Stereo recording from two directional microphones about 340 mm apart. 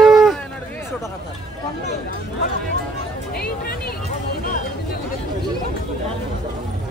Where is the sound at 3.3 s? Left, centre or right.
Left.